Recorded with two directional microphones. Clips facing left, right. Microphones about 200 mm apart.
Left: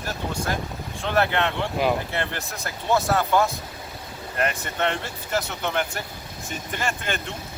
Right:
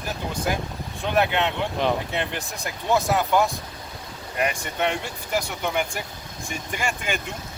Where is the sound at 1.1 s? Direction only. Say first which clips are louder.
Even; 15° right (ahead or behind).